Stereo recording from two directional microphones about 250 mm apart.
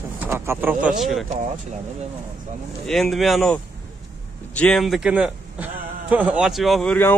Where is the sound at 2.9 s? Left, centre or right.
Centre.